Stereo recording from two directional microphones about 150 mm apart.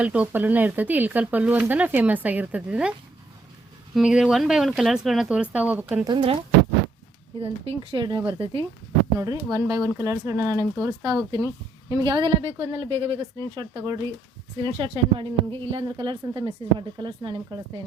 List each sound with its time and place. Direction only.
0.0 s speech: 10° right (ahead or behind)
3.9 s speech: 5° right (ahead or behind)
6.1 s a woman's voice: 35° right (ahead or behind)
7.3 s a woman's voice: 40° right (ahead or behind)
9.1 s a woman's voice: 25° right (ahead or behind)